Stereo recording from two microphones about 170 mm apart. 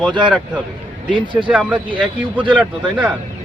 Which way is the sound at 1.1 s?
30° right (ahead or behind).